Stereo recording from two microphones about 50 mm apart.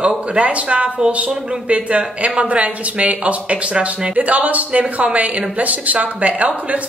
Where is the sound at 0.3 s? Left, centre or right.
Right.